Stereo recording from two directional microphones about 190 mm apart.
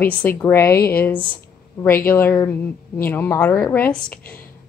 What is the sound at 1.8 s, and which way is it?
A woman's voice, 10° left (ahead or behind).